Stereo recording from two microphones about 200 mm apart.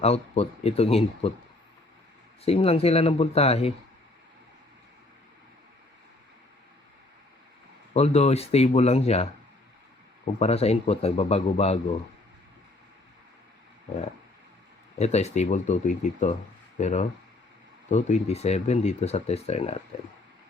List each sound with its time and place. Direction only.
0.0 s speech: 30° left (ahead or behind)
2.4 s speech: 30° left (ahead or behind)
7.9 s speech: 30° left (ahead or behind)
10.4 s speech: 30° left (ahead or behind)
14.9 s speech: 35° left (ahead or behind)